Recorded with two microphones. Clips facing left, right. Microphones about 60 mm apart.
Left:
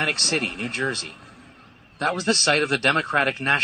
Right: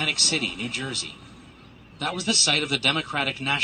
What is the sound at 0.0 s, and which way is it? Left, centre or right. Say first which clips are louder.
A man's voice: left 3 dB; left.